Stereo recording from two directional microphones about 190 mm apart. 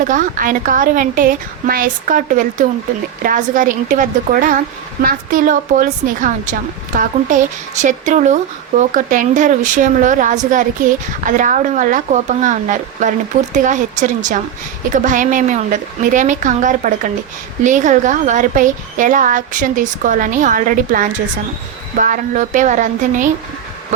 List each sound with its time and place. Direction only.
0.0 s a woman's voice: 45° right (ahead or behind)